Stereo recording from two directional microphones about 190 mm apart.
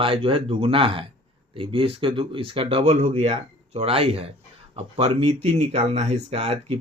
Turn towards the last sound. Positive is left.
turn(degrees=-30)  # may be behind; listen again after turning